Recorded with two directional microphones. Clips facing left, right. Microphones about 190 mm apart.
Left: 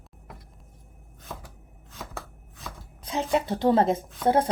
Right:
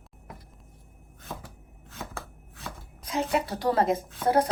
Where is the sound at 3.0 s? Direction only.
25° left (ahead or behind).